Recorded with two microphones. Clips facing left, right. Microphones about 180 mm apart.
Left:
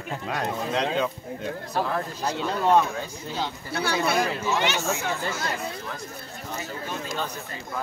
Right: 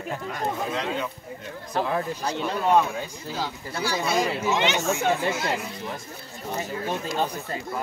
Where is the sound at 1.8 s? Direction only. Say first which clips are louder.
Right 3 dB; 15° right (ahead or behind).